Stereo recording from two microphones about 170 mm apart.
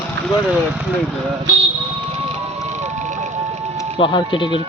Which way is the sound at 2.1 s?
35° right (ahead or behind).